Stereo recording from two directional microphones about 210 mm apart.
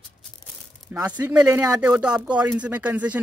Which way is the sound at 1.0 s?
5° right (ahead or behind).